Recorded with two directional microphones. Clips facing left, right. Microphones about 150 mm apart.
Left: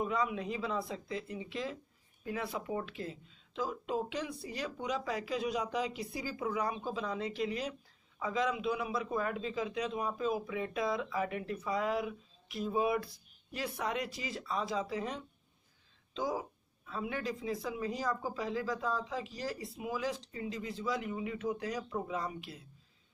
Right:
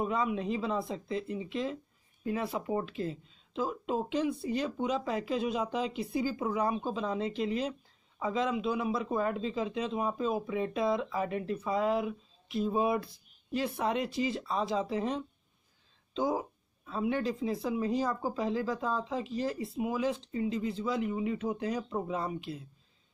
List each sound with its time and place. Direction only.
0.0 s speech: 25° right (ahead or behind)
16.8 s speech: 25° right (ahead or behind)